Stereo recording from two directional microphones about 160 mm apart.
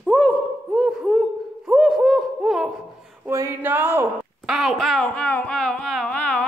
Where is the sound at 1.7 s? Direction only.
Centre (ahead or behind).